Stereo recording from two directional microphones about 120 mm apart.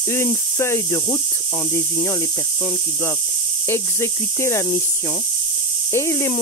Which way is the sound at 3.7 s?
20° left (ahead or behind).